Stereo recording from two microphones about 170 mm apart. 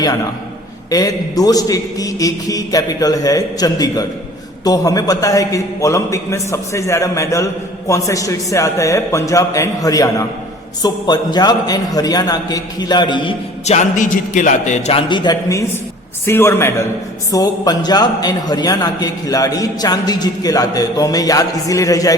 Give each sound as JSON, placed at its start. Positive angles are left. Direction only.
{"t": 0.9, "sound": "a man's voice", "side_deg": 20}
{"t": 13.7, "sound": "a man's voice", "side_deg": 45}